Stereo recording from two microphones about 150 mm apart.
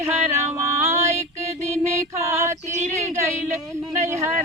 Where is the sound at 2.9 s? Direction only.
20° right (ahead or behind).